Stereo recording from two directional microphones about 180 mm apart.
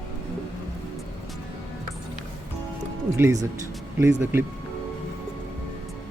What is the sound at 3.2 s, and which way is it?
Speech, 20° right (ahead or behind).